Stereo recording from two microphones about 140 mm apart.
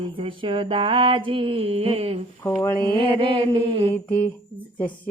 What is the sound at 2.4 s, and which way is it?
Mantra, 15° left (ahead or behind).